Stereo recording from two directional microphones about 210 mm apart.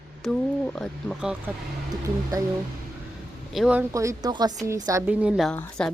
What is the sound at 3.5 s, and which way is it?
Speech, 5° right (ahead or behind).